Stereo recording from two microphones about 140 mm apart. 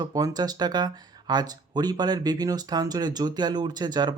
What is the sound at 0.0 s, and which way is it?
Speech, 25° right (ahead or behind).